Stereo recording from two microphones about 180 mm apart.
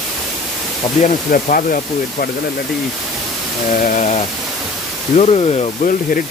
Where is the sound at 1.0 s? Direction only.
50° left (ahead or behind).